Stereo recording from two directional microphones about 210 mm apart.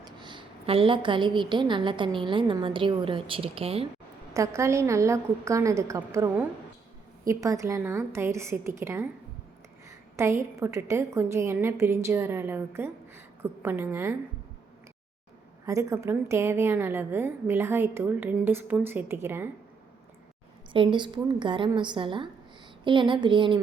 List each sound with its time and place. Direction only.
0.0 s a woman's voice: 20° right (ahead or behind)
4.4 s a woman's voice: 15° right (ahead or behind)
10.2 s a woman's voice: 15° right (ahead or behind)
15.6 s a woman's voice: 15° right (ahead or behind)
20.7 s a woman's voice: 25° right (ahead or behind)